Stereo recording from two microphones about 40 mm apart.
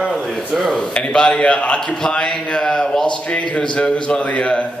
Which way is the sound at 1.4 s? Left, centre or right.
Left.